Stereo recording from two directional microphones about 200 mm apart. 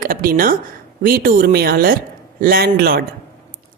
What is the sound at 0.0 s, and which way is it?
A woman's voice, 45° right (ahead or behind).